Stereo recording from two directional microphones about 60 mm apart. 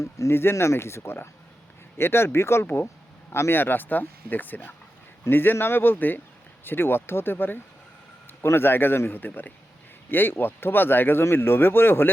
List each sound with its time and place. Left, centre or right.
0.0 s speech: left